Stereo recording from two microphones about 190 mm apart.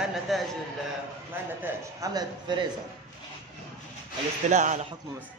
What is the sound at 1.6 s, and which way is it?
A man's voice, 20° right (ahead or behind).